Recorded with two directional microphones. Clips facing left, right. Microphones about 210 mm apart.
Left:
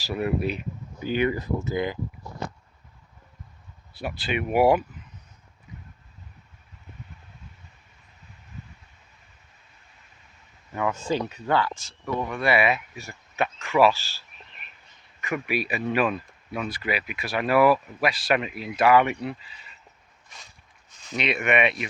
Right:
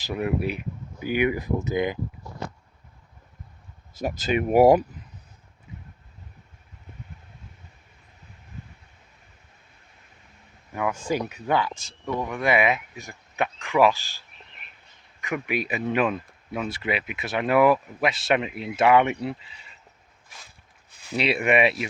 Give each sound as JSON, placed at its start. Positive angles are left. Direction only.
{"t": 0.0, "sound": "speech", "side_deg": -15}
{"t": 3.9, "sound": "speech", "side_deg": -40}
{"t": 11.1, "sound": "speech", "side_deg": -10}
{"t": 21.2, "sound": "speech", "side_deg": -30}